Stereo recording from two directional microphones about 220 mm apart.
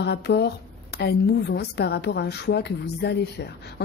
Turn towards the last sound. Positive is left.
turn(degrees=50)  # may be behind; listen again after turning